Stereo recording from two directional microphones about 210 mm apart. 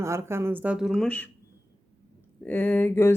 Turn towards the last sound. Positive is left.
turn(degrees=10)  # may be behind; listen again after turning